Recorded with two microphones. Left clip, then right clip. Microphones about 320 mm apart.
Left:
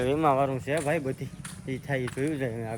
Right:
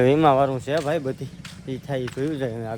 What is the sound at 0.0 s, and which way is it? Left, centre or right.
Speech, right.